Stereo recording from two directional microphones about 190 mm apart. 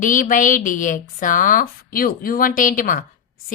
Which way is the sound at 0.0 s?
45° left (ahead or behind).